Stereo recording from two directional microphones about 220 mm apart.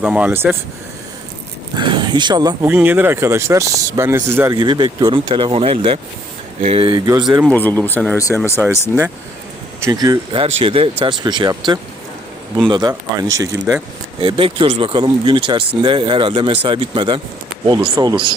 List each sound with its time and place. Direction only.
0.0 s speech: 5° right (ahead or behind)
1.7 s speech: 20° right (ahead or behind)
7.4 s speech: 10° left (ahead or behind)
9.8 s speech: 15° right (ahead or behind)